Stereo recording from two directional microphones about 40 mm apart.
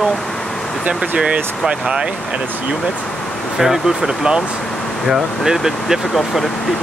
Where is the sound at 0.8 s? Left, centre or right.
Right.